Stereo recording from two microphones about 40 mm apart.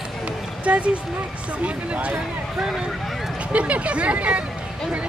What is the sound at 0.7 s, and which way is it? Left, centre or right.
Speech, right.